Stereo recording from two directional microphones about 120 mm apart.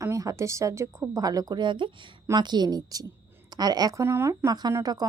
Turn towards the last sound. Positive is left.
turn(degrees=-30)  # may be behind; listen again after turning